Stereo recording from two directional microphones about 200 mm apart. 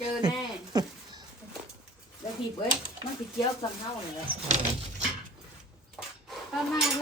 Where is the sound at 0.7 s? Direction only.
20° right (ahead or behind).